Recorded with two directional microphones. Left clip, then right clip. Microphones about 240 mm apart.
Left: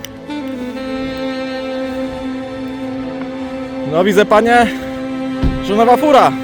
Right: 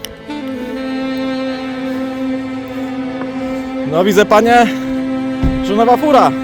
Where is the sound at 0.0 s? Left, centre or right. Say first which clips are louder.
Even; centre.